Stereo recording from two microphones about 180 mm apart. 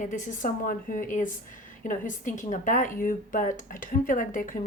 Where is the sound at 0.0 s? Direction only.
45° left (ahead or behind).